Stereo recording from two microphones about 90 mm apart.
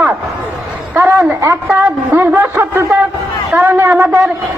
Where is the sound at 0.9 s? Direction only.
25° right (ahead or behind).